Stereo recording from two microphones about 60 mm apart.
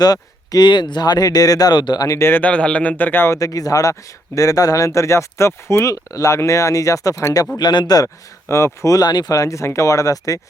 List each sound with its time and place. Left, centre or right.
0.0 s speech: left
2.1 s speech: left
2.4 s a man's voice: left
3.3 s speech: left
7.5 s speech: left
8.0 s speech: left